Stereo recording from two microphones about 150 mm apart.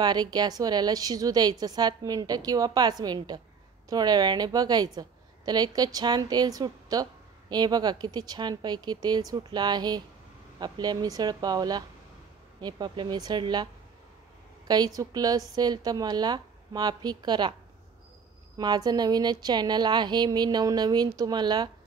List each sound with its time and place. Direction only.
0.0 s a woman's voice: 25° right (ahead or behind)
15.0 s a woman's voice: 25° right (ahead or behind)
18.6 s a woman's voice: 25° right (ahead or behind)